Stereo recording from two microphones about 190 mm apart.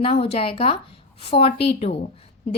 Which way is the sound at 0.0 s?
30° left (ahead or behind).